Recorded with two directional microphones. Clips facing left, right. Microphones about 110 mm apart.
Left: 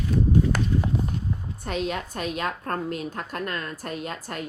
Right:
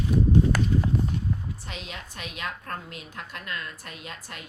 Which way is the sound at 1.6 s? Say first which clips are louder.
Left 11 dB; 50° left (ahead or behind).